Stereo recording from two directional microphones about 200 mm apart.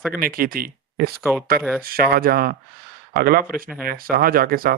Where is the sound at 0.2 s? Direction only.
45° right (ahead or behind).